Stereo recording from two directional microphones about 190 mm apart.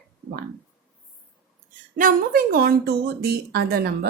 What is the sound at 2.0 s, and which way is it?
A woman's voice, 50° right (ahead or behind).